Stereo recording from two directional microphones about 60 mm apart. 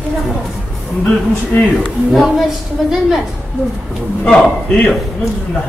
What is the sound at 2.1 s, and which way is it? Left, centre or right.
Speech, centre.